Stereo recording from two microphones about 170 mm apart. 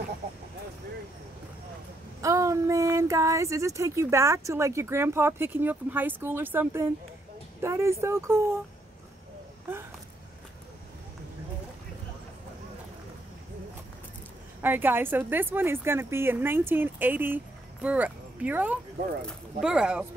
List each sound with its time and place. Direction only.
2.2 s speech: 20° right (ahead or behind)
14.6 s speech: 10° right (ahead or behind)